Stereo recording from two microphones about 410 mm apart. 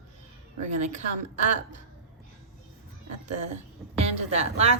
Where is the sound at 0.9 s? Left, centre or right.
Centre.